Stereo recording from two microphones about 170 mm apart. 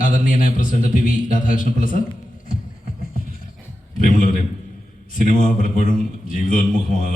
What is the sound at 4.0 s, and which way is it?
A man's voice, 50° left (ahead or behind).